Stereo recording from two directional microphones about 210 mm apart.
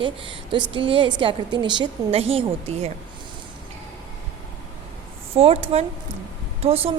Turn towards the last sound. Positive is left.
turn(degrees=-30)  # may be behind; listen again after turning